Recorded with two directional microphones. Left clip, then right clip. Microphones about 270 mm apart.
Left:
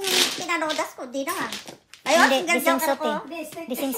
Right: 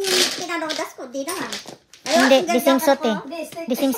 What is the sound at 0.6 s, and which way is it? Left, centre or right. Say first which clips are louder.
Speech: even; centre.